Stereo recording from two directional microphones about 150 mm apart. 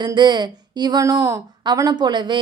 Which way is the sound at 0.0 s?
30° right (ahead or behind).